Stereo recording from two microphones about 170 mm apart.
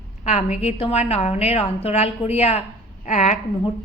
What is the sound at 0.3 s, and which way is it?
A woman's voice, 40° left (ahead or behind).